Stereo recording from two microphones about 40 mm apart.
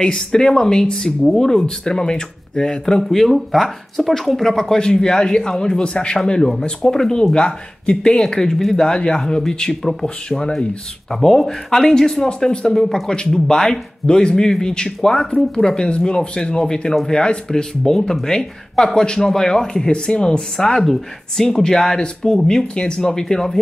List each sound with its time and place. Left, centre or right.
0.0 s speech: centre
3.1 s speech: centre; by 6.5 s left
6.9 s speech: centre
7.3 s speech: left
8.2 s speech: centre
11.1 s speech: centre
13.1 s speech: centre